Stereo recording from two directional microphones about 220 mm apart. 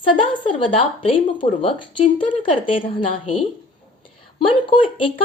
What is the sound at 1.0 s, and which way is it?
Speech, 25° left (ahead or behind).